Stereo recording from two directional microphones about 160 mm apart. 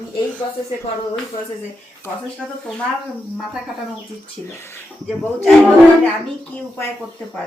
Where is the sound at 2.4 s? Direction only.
5° right (ahead or behind).